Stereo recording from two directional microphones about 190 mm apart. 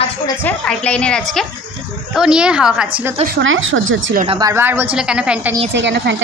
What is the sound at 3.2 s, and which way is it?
Speech, 70° right (ahead or behind).